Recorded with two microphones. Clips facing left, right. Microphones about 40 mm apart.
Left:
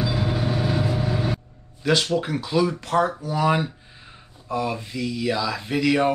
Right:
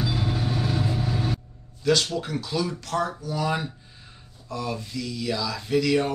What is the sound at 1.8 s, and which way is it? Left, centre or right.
Speech, left.